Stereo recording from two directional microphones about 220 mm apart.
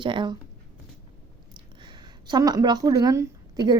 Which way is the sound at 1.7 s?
20° right (ahead or behind).